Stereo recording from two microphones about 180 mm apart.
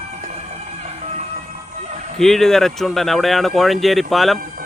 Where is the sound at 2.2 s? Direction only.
Centre (ahead or behind).